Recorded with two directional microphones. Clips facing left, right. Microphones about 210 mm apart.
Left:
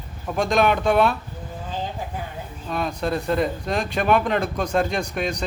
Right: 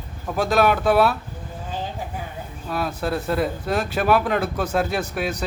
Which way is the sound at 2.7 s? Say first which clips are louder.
Even; 5° right (ahead or behind).